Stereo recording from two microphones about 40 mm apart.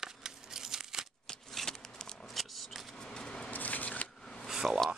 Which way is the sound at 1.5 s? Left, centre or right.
Centre.